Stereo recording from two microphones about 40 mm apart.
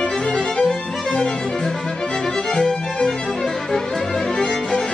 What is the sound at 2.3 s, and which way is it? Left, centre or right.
Music, centre.